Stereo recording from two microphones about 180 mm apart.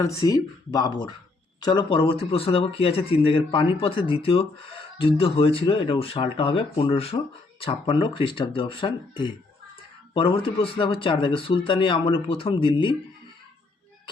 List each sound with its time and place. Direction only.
0.0 s speech: 20° left (ahead or behind)